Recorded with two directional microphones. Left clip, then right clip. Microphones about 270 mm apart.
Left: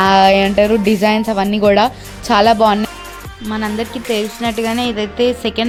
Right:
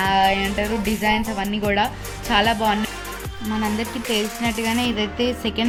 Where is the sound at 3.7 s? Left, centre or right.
Centre.